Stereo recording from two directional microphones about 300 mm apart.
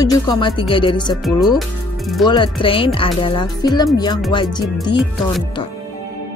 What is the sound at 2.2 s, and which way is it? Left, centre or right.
Speech, centre.